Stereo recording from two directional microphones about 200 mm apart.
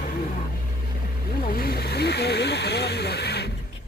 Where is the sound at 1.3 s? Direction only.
50° left (ahead or behind).